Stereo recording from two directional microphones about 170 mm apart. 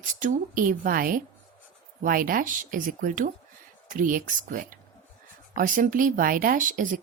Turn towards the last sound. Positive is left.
turn(degrees=-50)  # may be behind; listen again after turning